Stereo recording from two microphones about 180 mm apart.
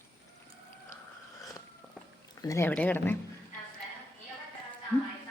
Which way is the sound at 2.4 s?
15° left (ahead or behind).